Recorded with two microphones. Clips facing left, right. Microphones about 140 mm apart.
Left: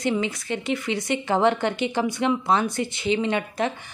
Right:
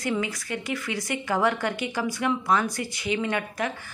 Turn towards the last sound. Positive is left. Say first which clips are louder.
# left 3 dB
turn(degrees=25)  # may be behind; listen again after turning